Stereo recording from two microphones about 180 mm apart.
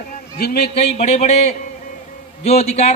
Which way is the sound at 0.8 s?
35° left (ahead or behind).